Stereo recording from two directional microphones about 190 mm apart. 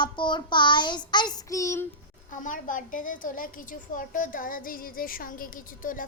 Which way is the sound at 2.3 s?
45° left (ahead or behind).